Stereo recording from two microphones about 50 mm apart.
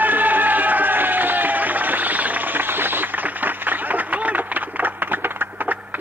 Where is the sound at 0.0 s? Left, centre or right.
Right.